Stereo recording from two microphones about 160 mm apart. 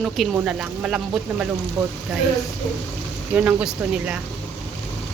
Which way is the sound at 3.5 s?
5° right (ahead or behind).